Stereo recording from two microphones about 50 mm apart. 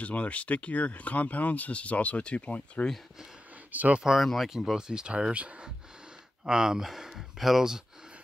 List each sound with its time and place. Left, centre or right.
0.0 s speech: left
3.7 s speech: right
4.2 s speech: centre